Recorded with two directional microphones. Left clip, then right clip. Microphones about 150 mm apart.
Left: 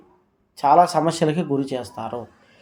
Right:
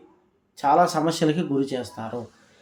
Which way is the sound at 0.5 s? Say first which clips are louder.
Left 4 dB; 25° left (ahead or behind).